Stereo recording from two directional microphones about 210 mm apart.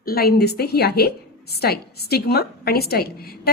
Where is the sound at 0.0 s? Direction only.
45° left (ahead or behind).